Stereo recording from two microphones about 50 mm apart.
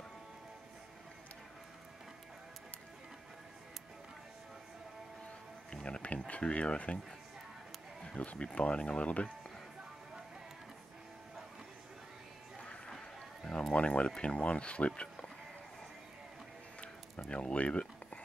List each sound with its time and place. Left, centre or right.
5.7 s speech: centre
8.0 s a sound: centre
8.3 s speech: left
12.5 s music: centre
13.4 s a sound: centre
13.7 s speech: left
17.3 s speech: left